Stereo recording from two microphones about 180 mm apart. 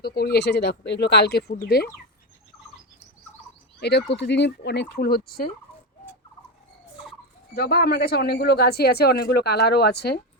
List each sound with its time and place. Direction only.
0.0 s speech: 60° left (ahead or behind)
3.8 s speech: 70° left (ahead or behind)
7.5 s speech: 60° left (ahead or behind)